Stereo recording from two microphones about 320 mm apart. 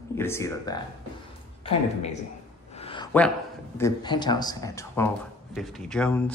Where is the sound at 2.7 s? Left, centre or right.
Centre.